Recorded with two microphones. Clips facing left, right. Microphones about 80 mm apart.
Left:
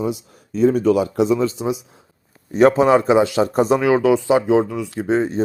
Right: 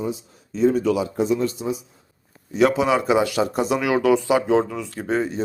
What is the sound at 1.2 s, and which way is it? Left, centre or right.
Speech, left.